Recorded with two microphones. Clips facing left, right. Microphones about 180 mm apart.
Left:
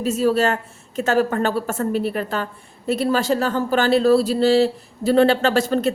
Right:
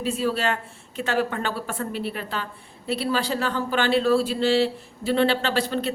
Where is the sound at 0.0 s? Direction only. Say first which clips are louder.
Left 6 dB; 45° left (ahead or behind).